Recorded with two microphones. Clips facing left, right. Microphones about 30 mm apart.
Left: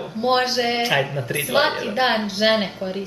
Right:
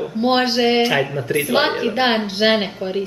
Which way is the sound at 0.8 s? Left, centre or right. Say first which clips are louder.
Right 3 dB; centre.